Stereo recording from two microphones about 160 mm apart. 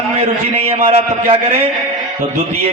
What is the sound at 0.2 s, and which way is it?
A man's voice, 35° right (ahead or behind).